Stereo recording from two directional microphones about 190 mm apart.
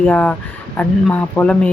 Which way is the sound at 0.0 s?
5° left (ahead or behind).